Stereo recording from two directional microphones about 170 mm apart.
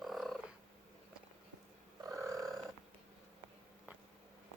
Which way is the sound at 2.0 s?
20° right (ahead or behind).